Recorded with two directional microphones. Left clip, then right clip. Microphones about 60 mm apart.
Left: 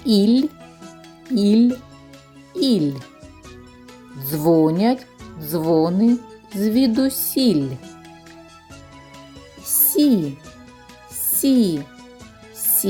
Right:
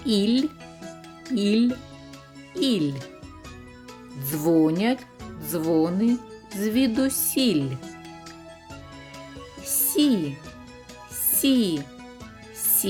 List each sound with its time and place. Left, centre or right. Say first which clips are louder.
0.0 s speech: left 6 dB; left
0.8 s music: right 1 dB; centre
1.4 s speech: left 6 dB; left
2.6 s speech: left 5 dB; left
4.2 s music: left 5 dB; left
5.7 s speech: left 5 dB; left
6.1 s music: left 5 dB; centre
6.6 s music: left 5 dB; left
7.3 s speech: left 4 dB; left
9.8 s music: left 5 dB; left
11.4 s speech: left 4 dB; left
12.8 s speech: left 5 dB; left